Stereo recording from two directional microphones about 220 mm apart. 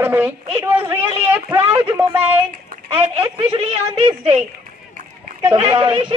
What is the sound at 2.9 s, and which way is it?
A woman's voice, 20° right (ahead or behind).